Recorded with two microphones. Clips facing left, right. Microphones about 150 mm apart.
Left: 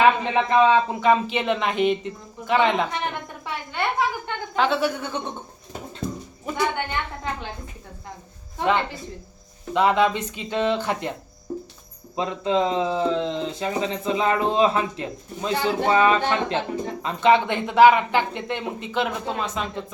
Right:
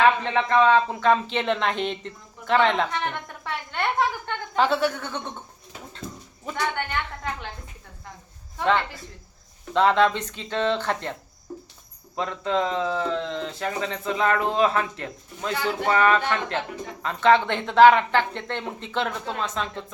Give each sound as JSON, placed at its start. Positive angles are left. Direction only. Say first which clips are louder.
{"t": 0.0, "sound": "a man's voice", "louder": "left 2 dB", "side_deg": 15}
{"t": 4.5, "sound": "speech", "louder": "even", "side_deg": 0}
{"t": 4.9, "sound": "a man's voice", "louder": "left 3 dB", "side_deg": 10}
{"t": 6.4, "sound": "a woman's voice", "louder": "left 3 dB", "side_deg": 15}
{"t": 8.6, "sound": "speech", "louder": "left 1 dB", "side_deg": 20}
{"t": 9.7, "sound": "a man's voice", "louder": "even", "side_deg": 10}
{"t": 12.1, "sound": "speech", "louder": "left 3 dB", "side_deg": 20}